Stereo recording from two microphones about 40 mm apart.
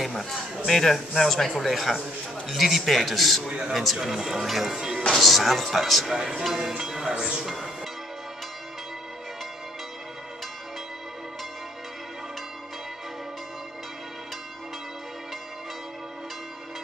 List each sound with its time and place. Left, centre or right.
0.0 s a sound: centre
0.7 s speech: centre
3.4 s speech: centre
3.7 s speech: centre
5.1 s speech: centre
7.4 s speech: centre